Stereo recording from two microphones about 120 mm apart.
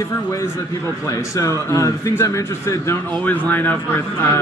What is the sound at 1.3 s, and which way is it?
A man's voice, 25° left (ahead or behind).